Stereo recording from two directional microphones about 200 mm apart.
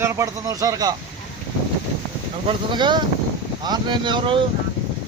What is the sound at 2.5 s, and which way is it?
Speech, 20° right (ahead or behind).